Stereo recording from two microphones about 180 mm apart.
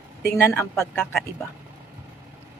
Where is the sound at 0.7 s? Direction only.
Centre (ahead or behind).